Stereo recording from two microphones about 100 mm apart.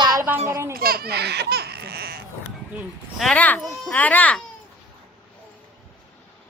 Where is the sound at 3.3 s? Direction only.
15° left (ahead or behind).